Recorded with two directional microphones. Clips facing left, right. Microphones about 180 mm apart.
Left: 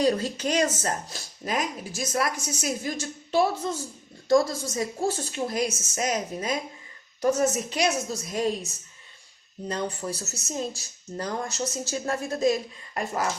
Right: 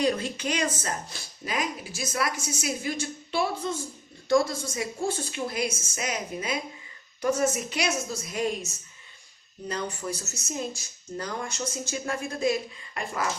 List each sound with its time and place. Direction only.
0.0 s speech: 35° left (ahead or behind)
4.7 s speech: 40° left (ahead or behind)